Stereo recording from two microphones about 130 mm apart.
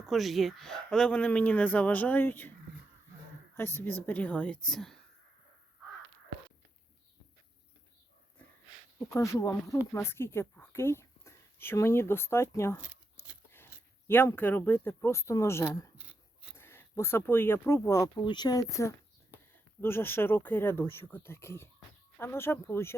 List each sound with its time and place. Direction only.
0.0 s speech: centre (ahead or behind); by 2.5 s 15° left (ahead or behind)
3.5 s speech: 15° left (ahead or behind)
9.0 s speech: 25° left (ahead or behind)
12.8 s a sound: 10° right (ahead or behind)
14.1 s speech: 15° left (ahead or behind)
16.0 s a sound: 10° right (ahead or behind)
16.6 s speech: 20° left (ahead or behind)